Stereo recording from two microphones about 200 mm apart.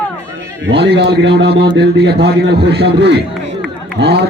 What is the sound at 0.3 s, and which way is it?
A man's voice, 60° right (ahead or behind).